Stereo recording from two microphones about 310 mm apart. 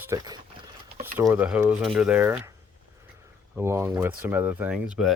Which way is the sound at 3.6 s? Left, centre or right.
Centre.